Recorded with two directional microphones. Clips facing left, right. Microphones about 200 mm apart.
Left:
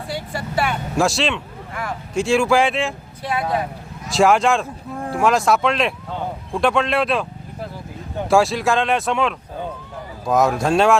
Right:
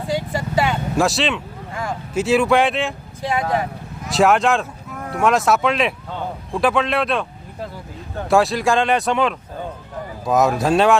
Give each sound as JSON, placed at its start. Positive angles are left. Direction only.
{"t": 0.2, "sound": "vehicle", "side_deg": -20}
{"t": 0.9, "sound": "speech", "side_deg": 0}
{"t": 4.1, "sound": "speech", "side_deg": 0}
{"t": 4.9, "sound": "a sound", "side_deg": 30}
{"t": 5.2, "sound": "speech", "side_deg": 0}
{"t": 8.3, "sound": "speech", "side_deg": 0}